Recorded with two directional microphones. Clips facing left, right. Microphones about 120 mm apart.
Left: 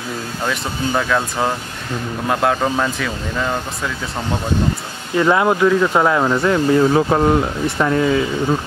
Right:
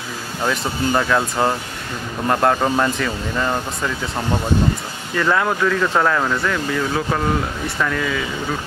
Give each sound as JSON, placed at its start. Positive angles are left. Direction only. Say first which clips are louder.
{"t": 0.4, "sound": "speech", "louder": "right 2 dB", "side_deg": -5}
{"t": 5.1, "sound": "speech", "louder": "left 4 dB", "side_deg": 20}